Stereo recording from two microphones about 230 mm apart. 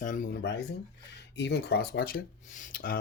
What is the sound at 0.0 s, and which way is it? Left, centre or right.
Speech, left.